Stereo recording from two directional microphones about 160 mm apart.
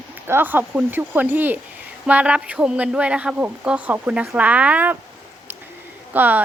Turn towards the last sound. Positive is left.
turn(degrees=-10)  # may be behind; listen again after turning